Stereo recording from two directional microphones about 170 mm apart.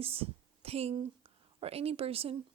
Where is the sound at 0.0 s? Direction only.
35° right (ahead or behind).